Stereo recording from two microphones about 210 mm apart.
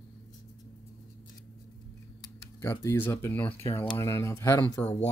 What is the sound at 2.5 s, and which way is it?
Speech, 15° left (ahead or behind).